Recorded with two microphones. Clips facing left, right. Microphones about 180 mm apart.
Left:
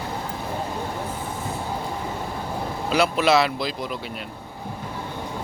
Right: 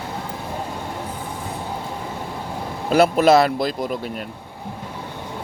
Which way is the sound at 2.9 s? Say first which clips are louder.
Right 5 dB; 50° right (ahead or behind).